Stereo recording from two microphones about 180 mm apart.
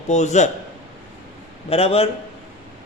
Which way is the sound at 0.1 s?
40° left (ahead or behind).